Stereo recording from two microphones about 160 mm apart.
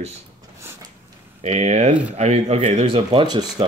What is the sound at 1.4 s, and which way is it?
Speech, 45° right (ahead or behind).